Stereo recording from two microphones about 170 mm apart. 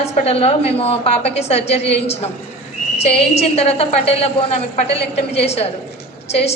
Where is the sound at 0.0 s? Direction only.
35° left (ahead or behind).